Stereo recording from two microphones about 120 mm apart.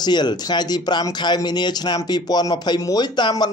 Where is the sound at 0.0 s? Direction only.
35° left (ahead or behind).